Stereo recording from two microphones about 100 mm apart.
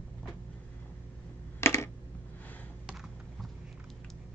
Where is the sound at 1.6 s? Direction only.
25° left (ahead or behind).